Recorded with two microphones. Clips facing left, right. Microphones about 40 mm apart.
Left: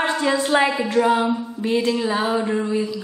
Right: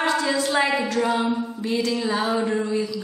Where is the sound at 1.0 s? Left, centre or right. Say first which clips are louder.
Left 3 dB; centre.